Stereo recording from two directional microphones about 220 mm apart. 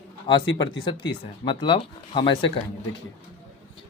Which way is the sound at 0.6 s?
20° left (ahead or behind).